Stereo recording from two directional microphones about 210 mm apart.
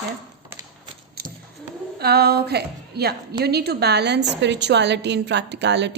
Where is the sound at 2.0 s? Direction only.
50° right (ahead or behind).